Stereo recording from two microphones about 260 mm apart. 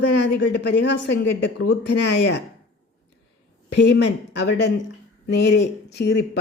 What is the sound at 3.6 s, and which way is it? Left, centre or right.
A woman's voice, left.